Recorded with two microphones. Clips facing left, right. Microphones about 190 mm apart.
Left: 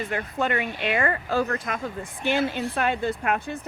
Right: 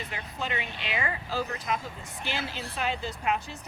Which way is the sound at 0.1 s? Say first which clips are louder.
Left 9 dB; 55° left (ahead or behind).